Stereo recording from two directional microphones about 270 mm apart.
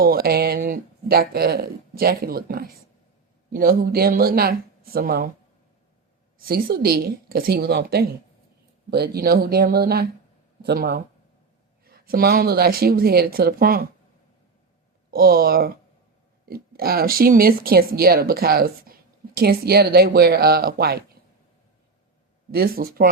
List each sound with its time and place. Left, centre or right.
0.0 s speech: right
6.4 s speech: right
15.1 s speech: right
22.5 s speech: right